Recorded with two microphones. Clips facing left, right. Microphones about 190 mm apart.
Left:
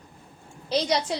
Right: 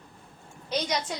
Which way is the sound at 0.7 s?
30° left (ahead or behind).